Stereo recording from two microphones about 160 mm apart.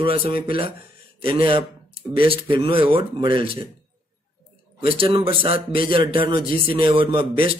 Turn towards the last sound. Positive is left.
turn(degrees=-35)  # may be behind; listen again after turning